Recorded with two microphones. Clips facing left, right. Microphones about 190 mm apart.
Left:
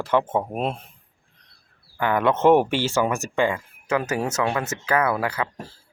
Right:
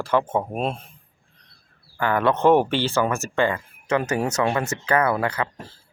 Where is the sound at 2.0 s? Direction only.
15° left (ahead or behind).